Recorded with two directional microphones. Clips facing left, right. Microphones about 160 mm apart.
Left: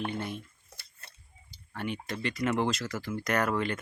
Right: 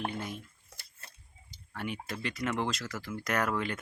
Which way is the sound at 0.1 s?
Centre (ahead or behind).